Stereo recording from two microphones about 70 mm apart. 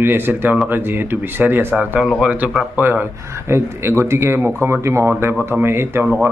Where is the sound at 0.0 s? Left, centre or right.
Right.